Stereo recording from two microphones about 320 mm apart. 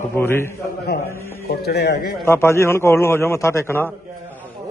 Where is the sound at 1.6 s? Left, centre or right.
Left.